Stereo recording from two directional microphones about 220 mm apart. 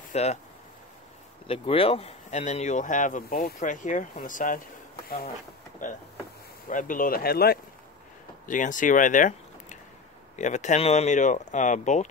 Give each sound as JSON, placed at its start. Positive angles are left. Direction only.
{"t": 0.1, "sound": "speech", "side_deg": 30}
{"t": 1.5, "sound": "speech", "side_deg": 25}
{"t": 5.8, "sound": "speech", "side_deg": 35}